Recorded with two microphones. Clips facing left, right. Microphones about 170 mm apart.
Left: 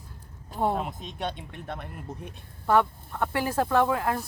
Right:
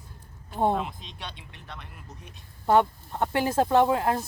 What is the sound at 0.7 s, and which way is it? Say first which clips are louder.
Speech: right 1 dB; 45° left (ahead or behind).